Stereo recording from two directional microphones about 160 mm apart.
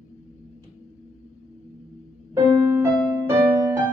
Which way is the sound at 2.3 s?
25° right (ahead or behind).